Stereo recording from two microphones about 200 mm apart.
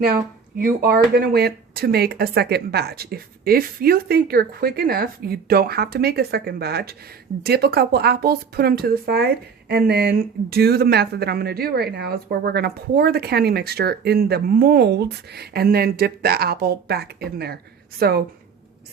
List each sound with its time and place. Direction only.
0.6 s speech: 45° right (ahead or behind)